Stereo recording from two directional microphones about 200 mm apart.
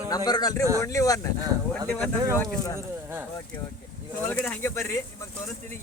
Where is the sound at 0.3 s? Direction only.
20° left (ahead or behind).